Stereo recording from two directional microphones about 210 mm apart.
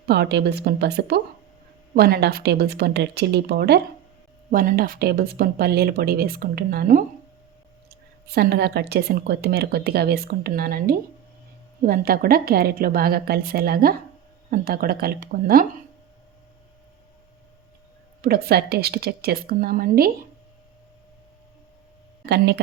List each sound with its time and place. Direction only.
0.1 s speech: 50° right (ahead or behind)
18.2 s speech: 45° right (ahead or behind)
22.3 s speech: 55° right (ahead or behind)